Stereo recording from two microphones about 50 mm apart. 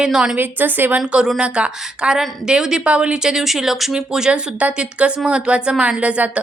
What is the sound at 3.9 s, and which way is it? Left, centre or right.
Speech, centre.